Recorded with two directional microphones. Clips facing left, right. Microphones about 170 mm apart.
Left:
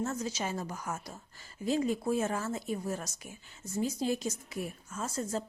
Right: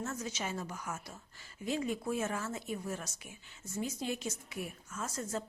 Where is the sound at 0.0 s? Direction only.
35° left (ahead or behind).